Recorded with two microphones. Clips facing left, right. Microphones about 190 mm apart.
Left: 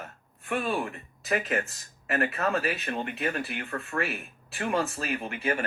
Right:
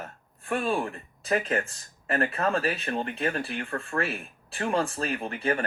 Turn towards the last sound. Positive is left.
turn(degrees=-30)  # may be behind; listen again after turning